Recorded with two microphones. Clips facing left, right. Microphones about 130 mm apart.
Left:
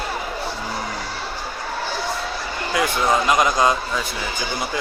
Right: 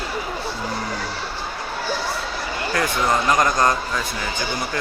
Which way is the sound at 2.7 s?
15° left (ahead or behind).